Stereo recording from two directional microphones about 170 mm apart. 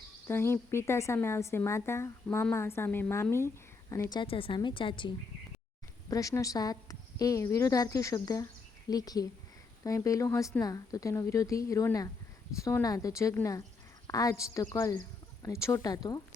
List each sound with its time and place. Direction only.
0.3 s a woman's voice: 15° left (ahead or behind); by 5.1 s 30° left (ahead or behind)
6.1 s a woman's voice: 20° left (ahead or behind)